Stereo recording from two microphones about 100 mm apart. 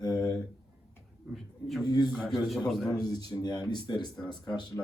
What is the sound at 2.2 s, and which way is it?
Speech, centre (ahead or behind).